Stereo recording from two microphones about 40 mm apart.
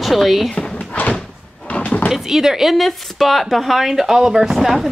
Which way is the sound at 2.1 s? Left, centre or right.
Centre.